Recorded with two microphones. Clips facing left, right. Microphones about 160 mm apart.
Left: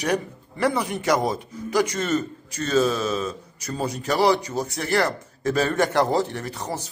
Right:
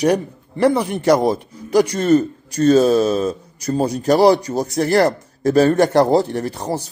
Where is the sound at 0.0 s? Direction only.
35° right (ahead or behind).